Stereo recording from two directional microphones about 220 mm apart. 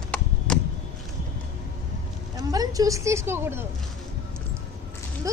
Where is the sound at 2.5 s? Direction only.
15° right (ahead or behind).